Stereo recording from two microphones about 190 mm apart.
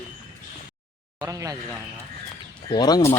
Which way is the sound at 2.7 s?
20° left (ahead or behind).